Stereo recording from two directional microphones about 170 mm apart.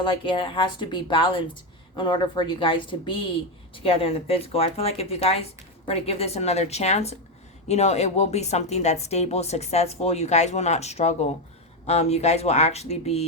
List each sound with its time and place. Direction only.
0.0 s a woman's voice: 30° left (ahead or behind)